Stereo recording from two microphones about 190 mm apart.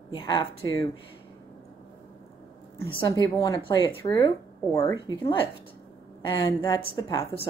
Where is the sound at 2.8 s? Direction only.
20° left (ahead or behind).